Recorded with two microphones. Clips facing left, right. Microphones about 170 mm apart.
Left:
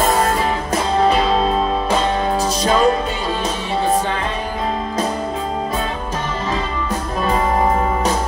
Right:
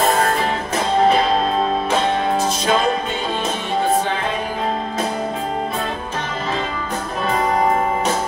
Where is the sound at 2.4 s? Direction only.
40° left (ahead or behind).